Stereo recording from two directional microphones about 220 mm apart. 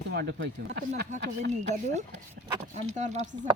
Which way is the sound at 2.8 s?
30° right (ahead or behind).